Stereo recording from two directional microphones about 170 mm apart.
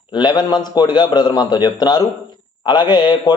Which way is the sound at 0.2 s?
25° left (ahead or behind).